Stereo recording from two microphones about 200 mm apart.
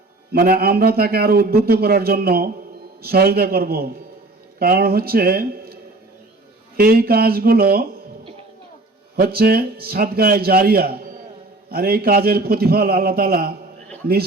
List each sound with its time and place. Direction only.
0.3 s a man's voice: 50° right (ahead or behind)
6.7 s a man's voice: 50° right (ahead or behind)
9.1 s a man's voice: 50° right (ahead or behind)